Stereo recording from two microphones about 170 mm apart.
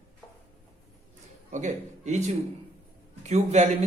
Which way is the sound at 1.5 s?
45° right (ahead or behind).